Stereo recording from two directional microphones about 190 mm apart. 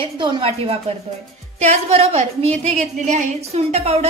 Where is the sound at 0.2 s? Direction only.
25° right (ahead or behind).